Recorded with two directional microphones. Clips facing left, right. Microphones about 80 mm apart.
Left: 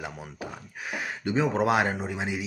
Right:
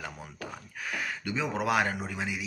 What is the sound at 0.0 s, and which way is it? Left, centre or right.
Speech, centre.